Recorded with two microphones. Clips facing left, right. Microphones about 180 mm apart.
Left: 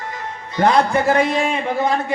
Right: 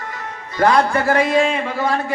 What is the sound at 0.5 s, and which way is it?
A man's voice, 20° left (ahead or behind).